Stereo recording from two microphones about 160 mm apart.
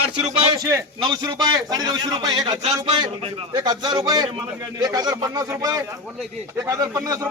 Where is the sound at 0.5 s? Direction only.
20° right (ahead or behind).